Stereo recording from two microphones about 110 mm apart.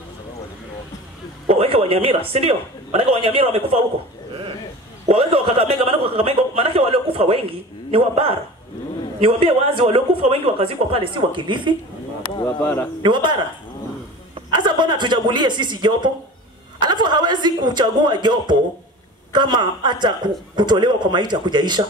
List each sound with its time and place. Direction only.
1.5 s a man's voice: 60° right (ahead or behind)
5.0 s a man's voice: 60° right (ahead or behind)
12.5 s speech: 20° left (ahead or behind)
13.0 s a man's voice: 45° right (ahead or behind)